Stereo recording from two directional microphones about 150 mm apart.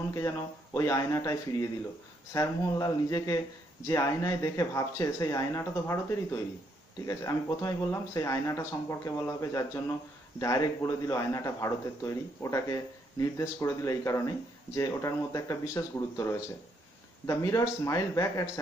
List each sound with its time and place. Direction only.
0.7 s speech: 20° left (ahead or behind)